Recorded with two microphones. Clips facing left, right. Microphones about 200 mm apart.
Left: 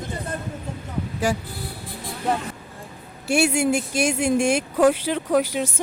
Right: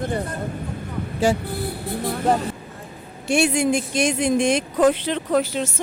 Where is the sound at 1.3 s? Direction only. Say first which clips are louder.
Right 4 dB; 25° right (ahead or behind).